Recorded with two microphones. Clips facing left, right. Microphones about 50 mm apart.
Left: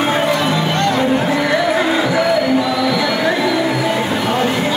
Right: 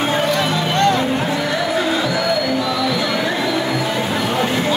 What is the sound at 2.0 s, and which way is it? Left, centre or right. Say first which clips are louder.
Music: left 4 dB; left.